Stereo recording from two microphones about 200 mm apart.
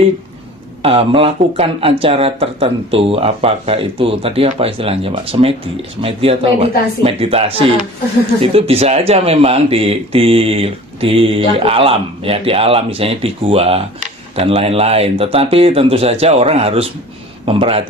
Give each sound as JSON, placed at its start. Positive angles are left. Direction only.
{"t": 0.8, "sound": "speech", "side_deg": -30}